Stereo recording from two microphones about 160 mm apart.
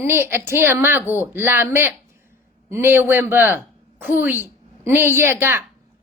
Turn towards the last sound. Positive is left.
turn(degrees=-15)  # may be behind; listen again after turning